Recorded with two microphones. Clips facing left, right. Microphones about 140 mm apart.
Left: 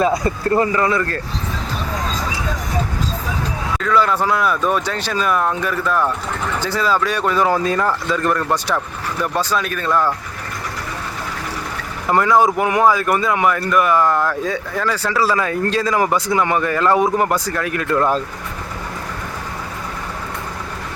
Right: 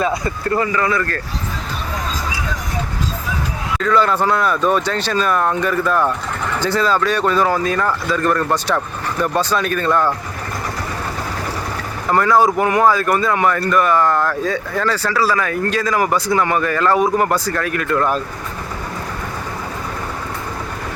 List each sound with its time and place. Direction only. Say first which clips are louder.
0.0 s speech: left 2 dB; 35° left (ahead or behind)
3.8 s speech: right 1 dB; 5° left (ahead or behind)
7.6 s speech: even; 25° left (ahead or behind)
8.1 s speech: right 3 dB; 10° left (ahead or behind)
12.1 s speech: even; 20° left (ahead or behind)